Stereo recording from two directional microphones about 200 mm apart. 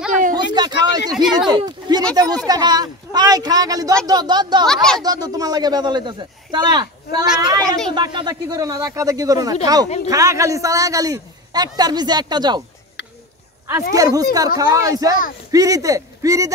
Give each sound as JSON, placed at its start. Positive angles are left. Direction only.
{"t": 0.3, "sound": "a sound", "side_deg": -20}
{"t": 1.1, "sound": "speech", "side_deg": 0}
{"t": 1.5, "sound": "a man's voice", "side_deg": -20}
{"t": 13.9, "sound": "speech", "side_deg": -20}